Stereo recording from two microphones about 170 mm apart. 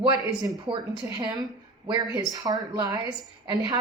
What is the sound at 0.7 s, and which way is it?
Speech, 20° right (ahead or behind).